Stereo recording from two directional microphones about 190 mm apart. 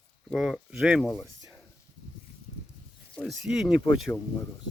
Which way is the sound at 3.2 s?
Centre (ahead or behind).